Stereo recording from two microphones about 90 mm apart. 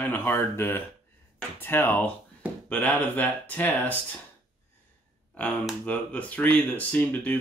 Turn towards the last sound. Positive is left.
turn(degrees=20)  # may be behind; listen again after turning